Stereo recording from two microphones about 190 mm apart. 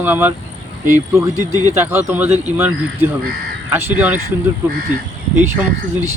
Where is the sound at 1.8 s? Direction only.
10° right (ahead or behind).